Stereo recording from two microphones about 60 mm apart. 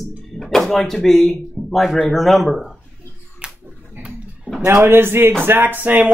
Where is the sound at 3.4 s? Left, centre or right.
Centre.